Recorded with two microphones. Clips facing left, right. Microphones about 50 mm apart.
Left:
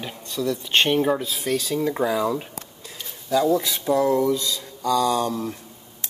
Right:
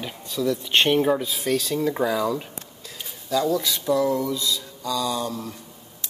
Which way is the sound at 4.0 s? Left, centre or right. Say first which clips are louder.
Left 3 dB; left.